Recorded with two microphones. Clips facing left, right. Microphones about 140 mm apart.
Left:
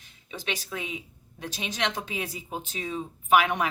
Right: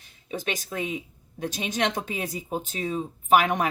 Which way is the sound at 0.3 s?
45° right (ahead or behind).